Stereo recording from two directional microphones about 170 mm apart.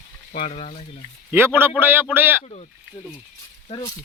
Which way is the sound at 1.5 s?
10° right (ahead or behind).